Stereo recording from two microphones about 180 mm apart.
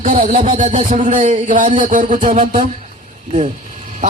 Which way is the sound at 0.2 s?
45° right (ahead or behind).